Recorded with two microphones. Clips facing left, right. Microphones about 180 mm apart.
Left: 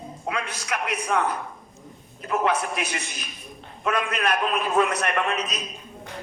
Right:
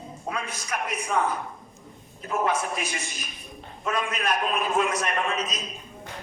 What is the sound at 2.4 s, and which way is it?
A man's voice, 65° left (ahead or behind).